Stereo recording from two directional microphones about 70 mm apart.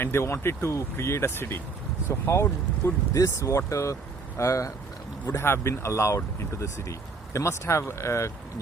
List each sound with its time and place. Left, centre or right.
0.0 s speech: left
5.2 s speech: left